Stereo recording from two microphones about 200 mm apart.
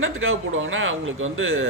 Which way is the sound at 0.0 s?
85° right.